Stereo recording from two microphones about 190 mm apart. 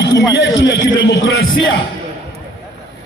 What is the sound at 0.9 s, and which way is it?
Speech, 60° left (ahead or behind).